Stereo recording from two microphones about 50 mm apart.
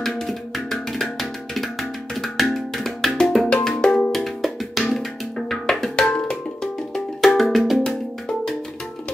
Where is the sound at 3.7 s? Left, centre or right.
Centre.